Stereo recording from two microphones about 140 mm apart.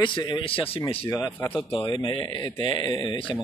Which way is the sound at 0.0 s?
35° left (ahead or behind).